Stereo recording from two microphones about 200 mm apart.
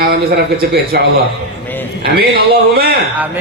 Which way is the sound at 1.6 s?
10° left (ahead or behind).